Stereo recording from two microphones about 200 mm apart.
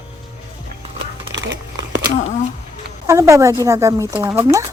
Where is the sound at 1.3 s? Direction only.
65° right (ahead or behind).